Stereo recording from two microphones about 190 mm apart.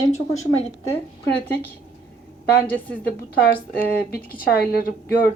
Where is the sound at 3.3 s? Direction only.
55° left (ahead or behind).